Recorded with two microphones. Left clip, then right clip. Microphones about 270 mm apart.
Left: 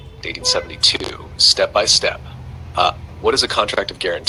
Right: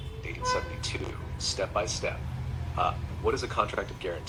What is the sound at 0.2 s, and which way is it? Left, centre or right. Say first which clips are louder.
Speech: left 10 dB; left.